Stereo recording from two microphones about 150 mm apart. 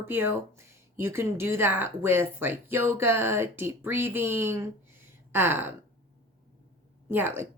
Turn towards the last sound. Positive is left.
turn(degrees=-15)  # may be behind; listen again after turning